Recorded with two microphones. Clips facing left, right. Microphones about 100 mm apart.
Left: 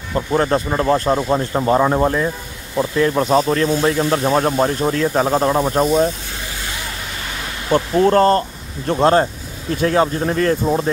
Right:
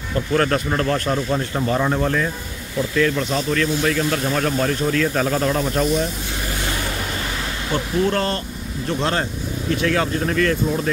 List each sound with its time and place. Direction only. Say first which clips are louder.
0.1 s speech: left 2 dB; 25° left (ahead or behind)
3.2 s speech: left 6 dB; 45° left (ahead or behind)
7.7 s speech: left 7 dB; 40° left (ahead or behind)